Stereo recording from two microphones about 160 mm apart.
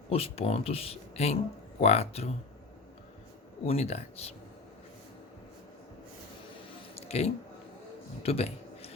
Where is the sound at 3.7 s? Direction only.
40° left (ahead or behind).